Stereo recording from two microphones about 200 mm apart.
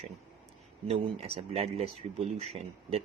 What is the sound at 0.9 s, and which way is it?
Speech, 30° right (ahead or behind).